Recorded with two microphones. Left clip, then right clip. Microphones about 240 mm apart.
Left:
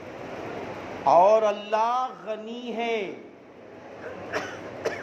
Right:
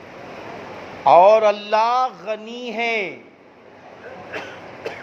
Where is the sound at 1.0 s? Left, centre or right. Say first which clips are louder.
Right 7 dB; right.